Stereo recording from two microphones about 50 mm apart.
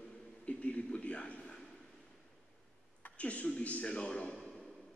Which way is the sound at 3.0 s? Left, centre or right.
Left.